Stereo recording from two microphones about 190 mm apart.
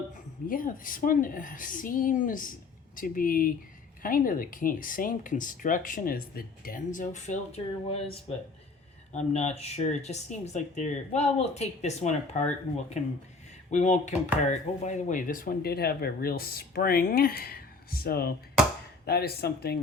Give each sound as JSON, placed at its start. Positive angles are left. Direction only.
{"t": 0.4, "sound": "speech", "side_deg": 45}
{"t": 13.7, "sound": "speech", "side_deg": 40}